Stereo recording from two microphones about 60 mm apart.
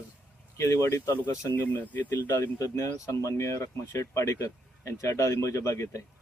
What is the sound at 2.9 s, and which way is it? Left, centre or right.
Speech, left.